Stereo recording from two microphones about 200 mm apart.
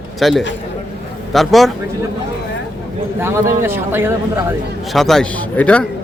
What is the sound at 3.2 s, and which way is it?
A man's voice, 10° right (ahead or behind).